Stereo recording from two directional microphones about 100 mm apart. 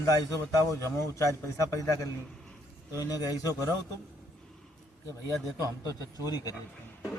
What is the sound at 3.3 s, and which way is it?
Speech, 35° left (ahead or behind).